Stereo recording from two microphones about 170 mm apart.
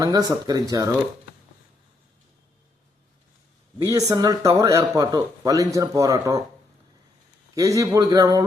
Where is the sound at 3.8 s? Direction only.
20° right (ahead or behind).